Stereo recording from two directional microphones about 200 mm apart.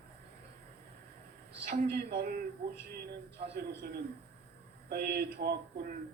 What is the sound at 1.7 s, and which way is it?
Speech, 50° right (ahead or behind).